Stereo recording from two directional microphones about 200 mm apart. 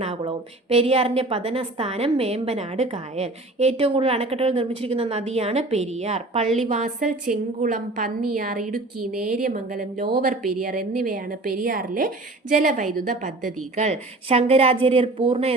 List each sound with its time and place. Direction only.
0.0 s a woman's voice: 30° right (ahead or behind)